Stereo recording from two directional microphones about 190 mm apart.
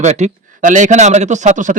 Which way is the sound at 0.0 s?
35° right (ahead or behind).